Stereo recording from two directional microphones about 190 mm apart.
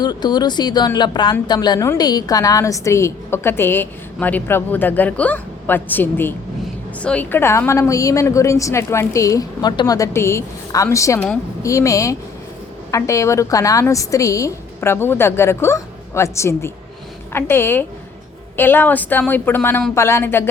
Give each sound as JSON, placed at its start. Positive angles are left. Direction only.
{"t": 0.0, "sound": "speech", "side_deg": 20}